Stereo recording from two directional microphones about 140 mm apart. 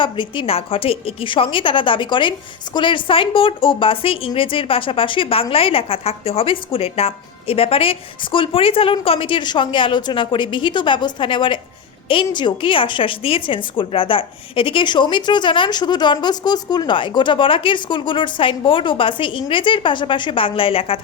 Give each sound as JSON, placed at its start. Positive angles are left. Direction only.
{"t": 0.0, "sound": "a woman's voice", "side_deg": 35}